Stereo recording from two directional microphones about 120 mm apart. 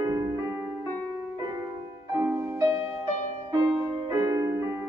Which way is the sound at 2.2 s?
20° right (ahead or behind).